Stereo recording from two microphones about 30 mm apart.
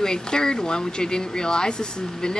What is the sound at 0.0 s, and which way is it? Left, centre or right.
Speech, left.